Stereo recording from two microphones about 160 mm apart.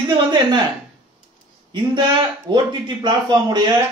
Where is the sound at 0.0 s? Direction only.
30° right (ahead or behind).